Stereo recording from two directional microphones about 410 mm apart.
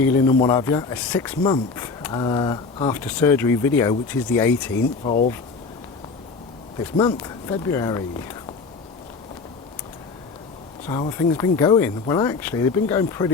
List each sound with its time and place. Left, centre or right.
0.0 s speech: centre
5.0 s speech: centre
6.9 s speech: centre
10.8 s speech: centre